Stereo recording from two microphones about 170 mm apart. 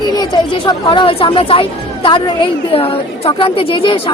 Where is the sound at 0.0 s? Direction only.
25° left (ahead or behind).